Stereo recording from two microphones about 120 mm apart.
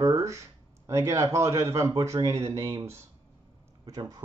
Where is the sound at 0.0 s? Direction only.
25° right (ahead or behind).